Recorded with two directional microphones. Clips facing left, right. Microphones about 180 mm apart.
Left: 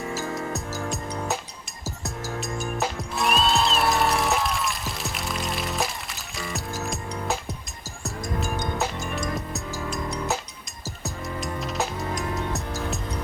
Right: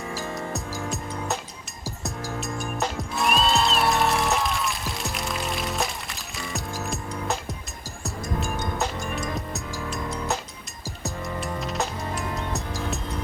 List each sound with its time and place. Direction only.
0.9 s music: centre (ahead or behind)
2.4 s music: centre (ahead or behind)
8.8 s music: centre (ahead or behind)